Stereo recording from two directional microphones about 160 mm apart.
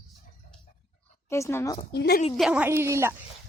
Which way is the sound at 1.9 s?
90° left.